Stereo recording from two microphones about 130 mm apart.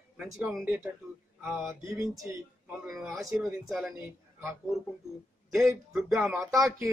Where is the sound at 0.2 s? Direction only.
5° right (ahead or behind).